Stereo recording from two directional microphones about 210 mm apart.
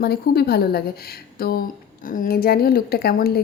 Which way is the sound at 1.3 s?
45° left (ahead or behind).